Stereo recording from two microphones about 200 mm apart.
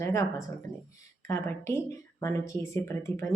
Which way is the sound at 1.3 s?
15° left (ahead or behind).